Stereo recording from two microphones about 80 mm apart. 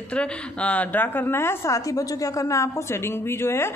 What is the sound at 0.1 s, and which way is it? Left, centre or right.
A woman's voice, centre.